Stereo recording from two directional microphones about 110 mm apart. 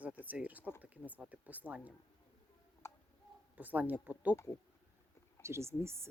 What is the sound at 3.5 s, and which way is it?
Speech, 15° right (ahead or behind).